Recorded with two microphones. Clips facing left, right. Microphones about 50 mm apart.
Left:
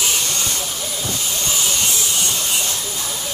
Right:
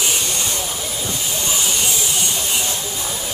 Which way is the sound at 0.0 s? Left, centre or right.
Centre.